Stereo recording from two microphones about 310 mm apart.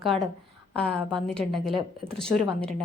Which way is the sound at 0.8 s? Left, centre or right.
Centre.